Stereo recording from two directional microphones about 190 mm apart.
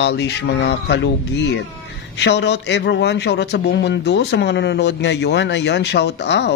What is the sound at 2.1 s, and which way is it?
Speech, 65° left (ahead or behind).